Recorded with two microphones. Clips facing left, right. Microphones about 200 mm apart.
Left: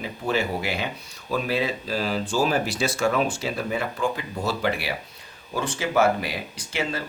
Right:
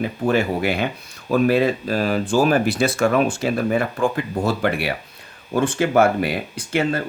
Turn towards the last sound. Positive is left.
turn(degrees=-55)  # may be behind; listen again after turning